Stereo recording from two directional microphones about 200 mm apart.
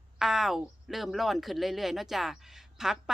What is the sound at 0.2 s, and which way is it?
Speech, centre (ahead or behind).